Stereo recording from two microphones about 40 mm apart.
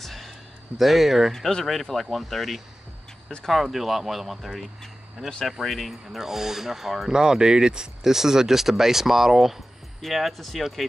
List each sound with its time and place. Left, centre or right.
0.0 s a sound: centre
0.7 s speech: centre
1.3 s speech: centre
3.6 s speech: centre
6.1 s speech: centre